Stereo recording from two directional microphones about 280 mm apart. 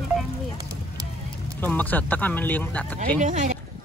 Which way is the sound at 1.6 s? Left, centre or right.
Centre.